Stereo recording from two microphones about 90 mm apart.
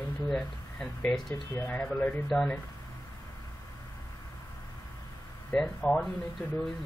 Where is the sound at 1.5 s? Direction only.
20° left (ahead or behind).